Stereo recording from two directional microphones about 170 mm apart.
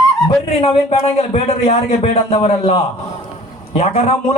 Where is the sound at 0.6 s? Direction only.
35° left (ahead or behind).